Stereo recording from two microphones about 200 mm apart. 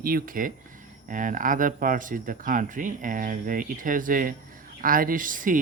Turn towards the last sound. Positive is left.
turn(degrees=-40)  # may be behind; listen again after turning